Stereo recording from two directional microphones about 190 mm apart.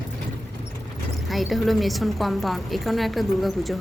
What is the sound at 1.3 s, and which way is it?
A woman's voice, centre (ahead or behind).